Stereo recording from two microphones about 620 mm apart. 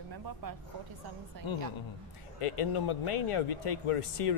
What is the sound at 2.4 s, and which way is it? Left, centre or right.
Speech, left.